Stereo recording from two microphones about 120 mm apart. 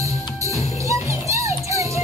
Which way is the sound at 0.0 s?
25° right (ahead or behind).